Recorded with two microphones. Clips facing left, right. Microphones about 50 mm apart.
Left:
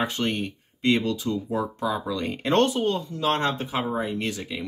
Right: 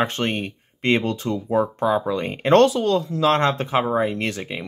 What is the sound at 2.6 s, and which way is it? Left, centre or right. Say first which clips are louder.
Speech: right 5 dB; right.